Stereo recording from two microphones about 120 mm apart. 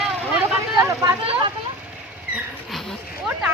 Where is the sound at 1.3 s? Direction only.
45° right (ahead or behind).